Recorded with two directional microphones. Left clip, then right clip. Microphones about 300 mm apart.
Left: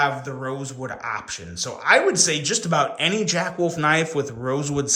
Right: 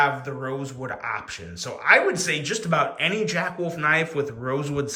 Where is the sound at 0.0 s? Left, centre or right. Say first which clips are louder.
Even; centre.